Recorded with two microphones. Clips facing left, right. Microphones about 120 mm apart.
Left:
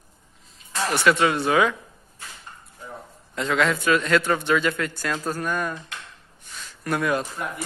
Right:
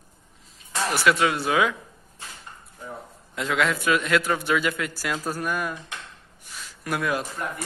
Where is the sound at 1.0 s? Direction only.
Centre (ahead or behind).